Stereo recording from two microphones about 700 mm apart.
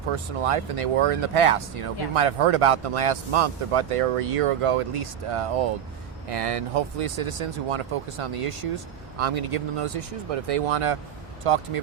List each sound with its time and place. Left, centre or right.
0.4 s speech: right